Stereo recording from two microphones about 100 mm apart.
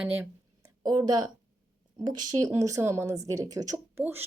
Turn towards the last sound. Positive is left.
turn(degrees=-20)  # may be behind; listen again after turning